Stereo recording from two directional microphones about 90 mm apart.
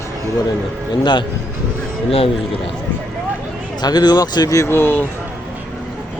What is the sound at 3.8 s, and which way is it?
A man's voice, 50° left (ahead or behind).